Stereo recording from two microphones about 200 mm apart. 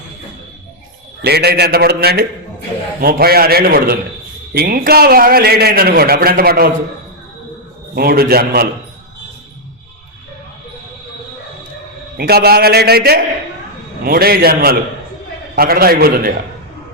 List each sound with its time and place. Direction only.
1.2 s a man's voice: 55° right (ahead or behind)
7.9 s a man's voice: 50° right (ahead or behind)
12.1 s a man's voice: 50° right (ahead or behind)